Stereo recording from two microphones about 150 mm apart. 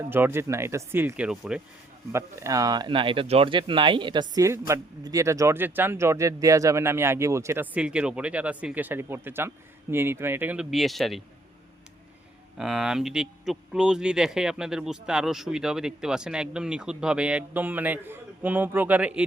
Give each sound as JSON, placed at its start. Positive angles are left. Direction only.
{"t": 0.1, "sound": "speech", "side_deg": -15}
{"t": 2.1, "sound": "speech", "side_deg": -20}
{"t": 12.5, "sound": "speech", "side_deg": -5}